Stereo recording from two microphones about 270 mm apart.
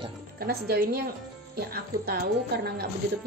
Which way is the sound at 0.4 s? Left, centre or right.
Right.